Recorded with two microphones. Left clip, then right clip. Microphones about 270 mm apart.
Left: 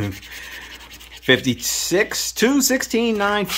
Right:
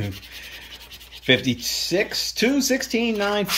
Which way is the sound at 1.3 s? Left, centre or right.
Centre.